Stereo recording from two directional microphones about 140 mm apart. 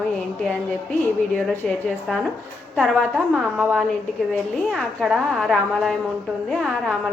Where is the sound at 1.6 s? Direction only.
Centre (ahead or behind).